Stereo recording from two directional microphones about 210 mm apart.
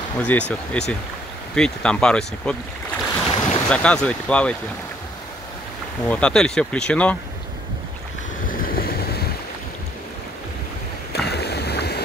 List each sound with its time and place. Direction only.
0.2 s speech: 5° left (ahead or behind)
3.3 s boat: 30° left (ahead or behind)
3.6 s speech: 5° left (ahead or behind)
6.0 s speech: 5° left (ahead or behind)
8.5 s boat: 45° left (ahead or behind)
11.1 s boat: 50° left (ahead or behind)